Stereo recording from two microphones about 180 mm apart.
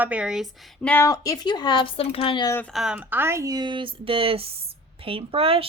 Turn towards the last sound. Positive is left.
turn(degrees=-30)  # may be behind; listen again after turning